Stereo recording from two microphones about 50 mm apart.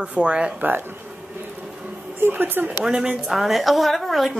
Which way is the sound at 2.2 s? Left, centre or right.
Right.